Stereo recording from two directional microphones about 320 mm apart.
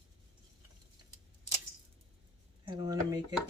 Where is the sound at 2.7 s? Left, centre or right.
Centre.